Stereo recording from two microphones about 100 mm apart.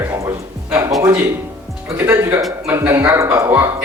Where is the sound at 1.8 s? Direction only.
15° right (ahead or behind).